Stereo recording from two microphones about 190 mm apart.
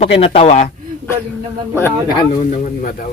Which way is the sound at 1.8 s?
10° left (ahead or behind).